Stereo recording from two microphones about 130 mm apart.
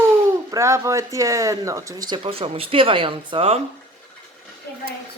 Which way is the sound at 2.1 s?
45° right (ahead or behind).